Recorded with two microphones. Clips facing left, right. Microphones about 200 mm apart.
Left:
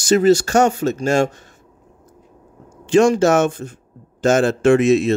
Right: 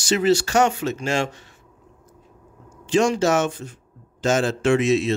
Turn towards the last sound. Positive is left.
turn(degrees=50)  # may be behind; listen again after turning